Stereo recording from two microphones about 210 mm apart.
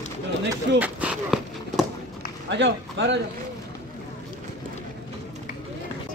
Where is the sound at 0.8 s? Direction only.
5° right (ahead or behind).